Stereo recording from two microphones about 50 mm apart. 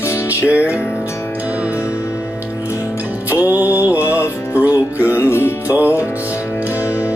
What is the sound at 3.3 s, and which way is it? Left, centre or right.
Music, right.